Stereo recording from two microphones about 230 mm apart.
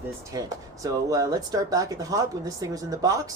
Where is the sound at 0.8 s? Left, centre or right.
Centre.